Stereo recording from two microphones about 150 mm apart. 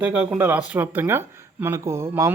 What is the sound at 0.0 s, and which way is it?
Speech, 10° right (ahead or behind).